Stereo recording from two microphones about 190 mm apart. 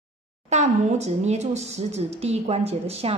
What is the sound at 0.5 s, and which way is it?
A woman's voice, 35° right (ahead or behind).